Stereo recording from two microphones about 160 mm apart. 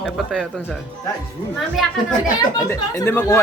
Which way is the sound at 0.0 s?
Centre (ahead or behind).